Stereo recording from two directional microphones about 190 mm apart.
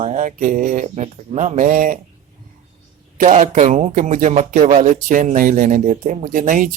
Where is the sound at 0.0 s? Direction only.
40° right (ahead or behind).